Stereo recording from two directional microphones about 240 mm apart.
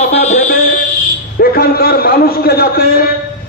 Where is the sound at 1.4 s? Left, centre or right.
Left.